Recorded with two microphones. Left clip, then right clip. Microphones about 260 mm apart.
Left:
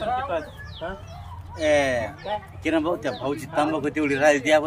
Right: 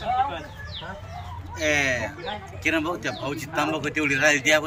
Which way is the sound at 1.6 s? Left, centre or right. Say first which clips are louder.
Left 2 dB; centre.